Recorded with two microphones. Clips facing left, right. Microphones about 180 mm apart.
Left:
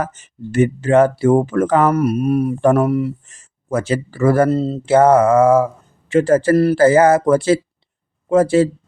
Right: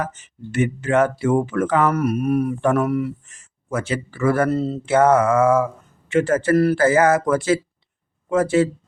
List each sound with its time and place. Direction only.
0.0 s speech: 45° left (ahead or behind)